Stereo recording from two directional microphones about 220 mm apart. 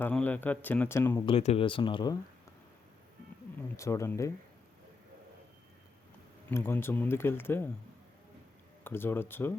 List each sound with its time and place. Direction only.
0.0 s speech: 5° left (ahead or behind)
1.3 s speech: 30° left (ahead or behind)
3.8 s speech: 15° left (ahead or behind)
6.5 s speech: 10° left (ahead or behind)
8.8 s speech: 10° left (ahead or behind)